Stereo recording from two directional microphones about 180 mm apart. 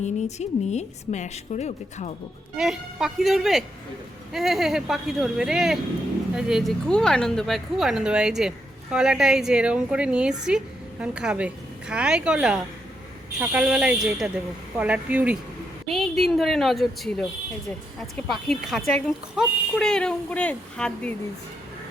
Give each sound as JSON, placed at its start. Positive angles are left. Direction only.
{"t": 0.0, "sound": "a woman's voice", "side_deg": 40}
{"t": 2.6, "sound": "speech", "side_deg": 0}